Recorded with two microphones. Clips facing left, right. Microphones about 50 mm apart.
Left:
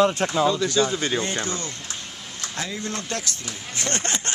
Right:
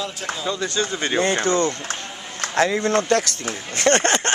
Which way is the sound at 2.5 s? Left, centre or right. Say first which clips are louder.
Right 12 dB; right.